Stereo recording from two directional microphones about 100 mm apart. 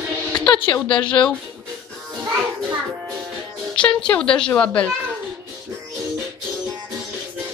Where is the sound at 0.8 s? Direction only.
55° left (ahead or behind).